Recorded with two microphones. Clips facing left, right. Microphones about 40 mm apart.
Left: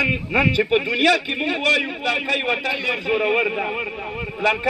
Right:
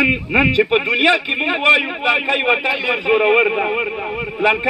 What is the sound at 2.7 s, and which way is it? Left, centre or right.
Speech, centre.